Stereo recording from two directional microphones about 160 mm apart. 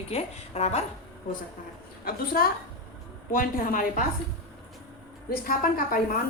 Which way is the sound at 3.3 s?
60° left (ahead or behind).